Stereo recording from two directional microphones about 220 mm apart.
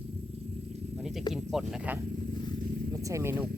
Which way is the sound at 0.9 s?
5° right (ahead or behind).